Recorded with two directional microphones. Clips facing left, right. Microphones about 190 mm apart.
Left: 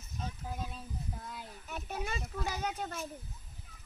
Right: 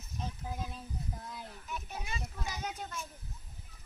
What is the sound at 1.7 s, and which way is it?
A child's voice, 50° left (ahead or behind).